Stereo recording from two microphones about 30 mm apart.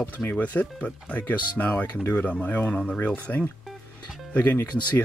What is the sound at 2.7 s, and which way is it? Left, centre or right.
Speech, left.